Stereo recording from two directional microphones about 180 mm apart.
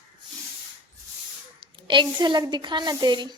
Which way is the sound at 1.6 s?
25° right (ahead or behind).